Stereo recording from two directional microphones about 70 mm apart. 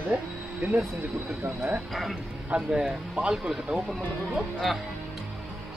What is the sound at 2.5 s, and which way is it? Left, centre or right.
Speech, centre.